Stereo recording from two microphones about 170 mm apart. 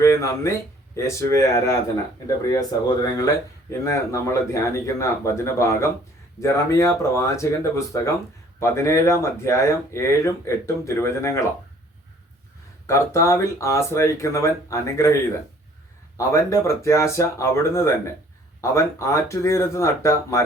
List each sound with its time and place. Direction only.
0.0 s speech: 15° left (ahead or behind)
12.9 s speech: 15° left (ahead or behind)
16.1 s speech: 20° left (ahead or behind)